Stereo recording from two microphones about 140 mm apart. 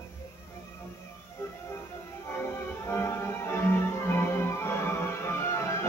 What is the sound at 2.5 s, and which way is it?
Music, 15° left (ahead or behind).